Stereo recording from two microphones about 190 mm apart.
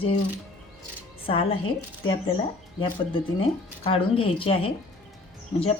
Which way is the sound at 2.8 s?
30° left (ahead or behind).